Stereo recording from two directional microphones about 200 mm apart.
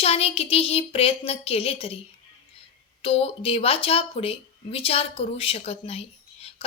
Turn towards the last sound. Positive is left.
turn(degrees=30)  # may be behind; listen again after turning